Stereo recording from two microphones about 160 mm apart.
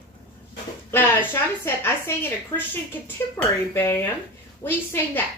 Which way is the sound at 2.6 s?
15° left (ahead or behind).